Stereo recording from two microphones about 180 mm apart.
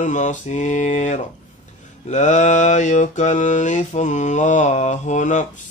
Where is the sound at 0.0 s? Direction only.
40° left (ahead or behind).